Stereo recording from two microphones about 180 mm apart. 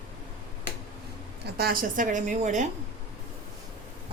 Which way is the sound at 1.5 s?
55° right (ahead or behind).